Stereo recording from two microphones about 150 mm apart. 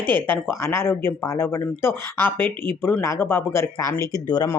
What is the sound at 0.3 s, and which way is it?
Speech, 15° left (ahead or behind).